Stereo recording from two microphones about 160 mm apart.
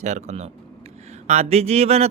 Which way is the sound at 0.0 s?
45° right (ahead or behind).